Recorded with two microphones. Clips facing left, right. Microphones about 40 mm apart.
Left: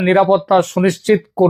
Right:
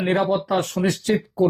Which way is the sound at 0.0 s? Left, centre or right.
Left.